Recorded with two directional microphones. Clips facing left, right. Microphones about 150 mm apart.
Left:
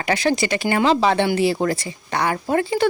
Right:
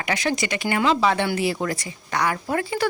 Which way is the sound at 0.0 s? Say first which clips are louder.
Left 5 dB; 35° left (ahead or behind).